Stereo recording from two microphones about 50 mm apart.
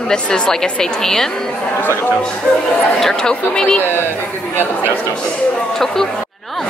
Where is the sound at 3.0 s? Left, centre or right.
Centre.